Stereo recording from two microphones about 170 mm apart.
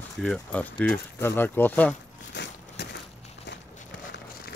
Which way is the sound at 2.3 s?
90° left.